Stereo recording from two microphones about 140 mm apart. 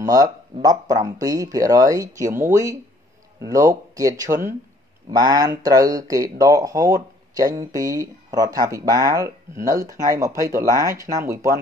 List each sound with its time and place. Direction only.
0.0 s speech: 25° right (ahead or behind)
5.1 s speech: 30° right (ahead or behind)